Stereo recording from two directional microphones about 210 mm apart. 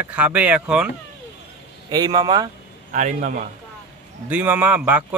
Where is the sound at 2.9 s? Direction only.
35° right (ahead or behind).